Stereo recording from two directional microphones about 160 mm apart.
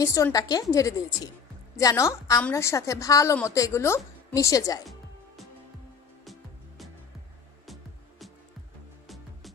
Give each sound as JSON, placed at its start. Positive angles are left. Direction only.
{"t": 0.0, "sound": "a woman's voice", "side_deg": 20}
{"t": 7.6, "sound": "music", "side_deg": 0}